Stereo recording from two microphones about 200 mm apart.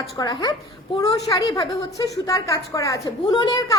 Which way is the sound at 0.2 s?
20° left (ahead or behind).